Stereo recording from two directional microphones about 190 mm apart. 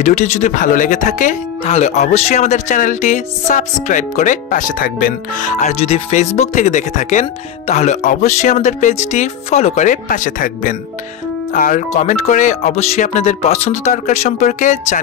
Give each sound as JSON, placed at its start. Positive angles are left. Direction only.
{"t": 0.0, "sound": "speech", "side_deg": 40}